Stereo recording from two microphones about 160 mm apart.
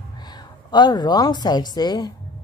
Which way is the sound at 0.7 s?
25° left (ahead or behind).